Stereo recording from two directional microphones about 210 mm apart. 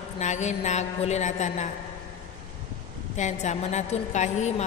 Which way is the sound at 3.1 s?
35° left (ahead or behind).